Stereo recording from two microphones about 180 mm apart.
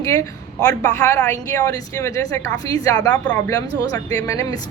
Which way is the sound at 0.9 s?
15° left (ahead or behind).